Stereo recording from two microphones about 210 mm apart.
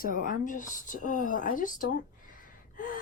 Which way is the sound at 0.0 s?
40° left (ahead or behind).